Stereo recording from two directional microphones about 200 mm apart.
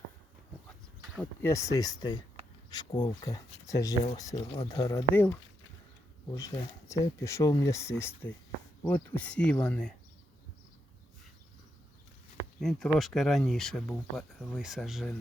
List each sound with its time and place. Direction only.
1.1 s speech: 10° left (ahead or behind)
12.5 s speech: centre (ahead or behind)